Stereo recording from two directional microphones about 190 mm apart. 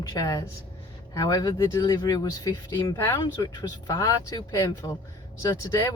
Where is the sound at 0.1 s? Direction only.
20° left (ahead or behind).